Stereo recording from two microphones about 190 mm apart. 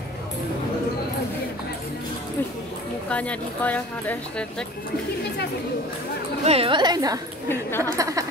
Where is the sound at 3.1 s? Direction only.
5° left (ahead or behind).